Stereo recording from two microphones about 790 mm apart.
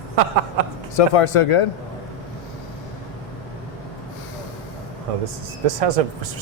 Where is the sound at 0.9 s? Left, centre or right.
Left.